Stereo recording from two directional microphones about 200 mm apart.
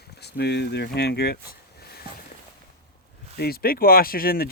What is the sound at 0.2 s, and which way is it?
Speech, 55° left (ahead or behind).